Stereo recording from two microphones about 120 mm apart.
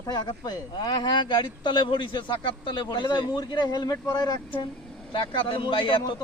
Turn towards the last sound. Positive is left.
turn(degrees=40)  # may be behind; listen again after turning